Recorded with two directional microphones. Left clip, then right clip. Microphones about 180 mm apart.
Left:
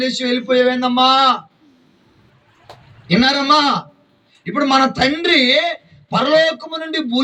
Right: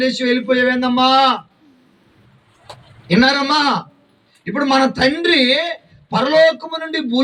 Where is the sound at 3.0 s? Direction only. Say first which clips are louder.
Even; 20° left (ahead or behind).